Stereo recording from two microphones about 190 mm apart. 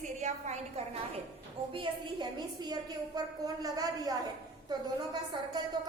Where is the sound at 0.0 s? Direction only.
40° right (ahead or behind).